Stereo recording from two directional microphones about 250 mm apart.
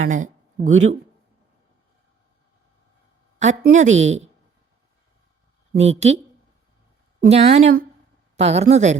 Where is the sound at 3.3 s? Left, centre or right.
Right.